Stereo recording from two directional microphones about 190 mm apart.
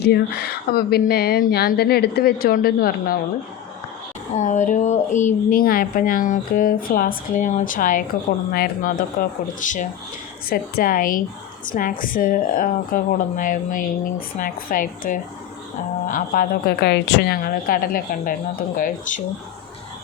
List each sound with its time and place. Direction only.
0.0 s speech: 60° left (ahead or behind)
4.4 s speech: 40° left (ahead or behind)